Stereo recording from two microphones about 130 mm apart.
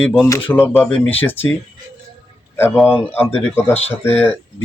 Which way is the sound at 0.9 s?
5° left (ahead or behind).